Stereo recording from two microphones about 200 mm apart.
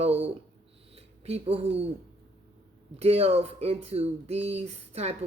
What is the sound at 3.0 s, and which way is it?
A woman's voice, 30° right (ahead or behind).